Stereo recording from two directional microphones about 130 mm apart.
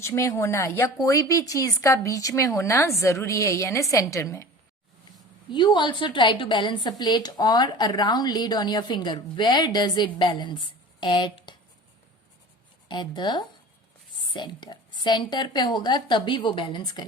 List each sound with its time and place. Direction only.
0.0 s a woman's voice: 20° left (ahead or behind)
5.5 s a woman's voice: 35° left (ahead or behind)
12.9 s a woman's voice: 35° left (ahead or behind)